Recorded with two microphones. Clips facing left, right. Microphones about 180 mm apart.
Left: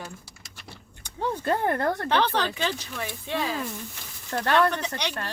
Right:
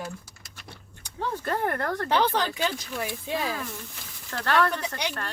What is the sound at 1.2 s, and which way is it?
Speech, 25° left (ahead or behind).